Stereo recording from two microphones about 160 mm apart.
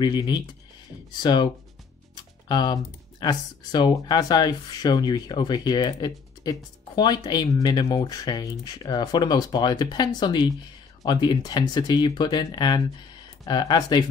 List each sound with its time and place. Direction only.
0.0 s speech: 25° left (ahead or behind)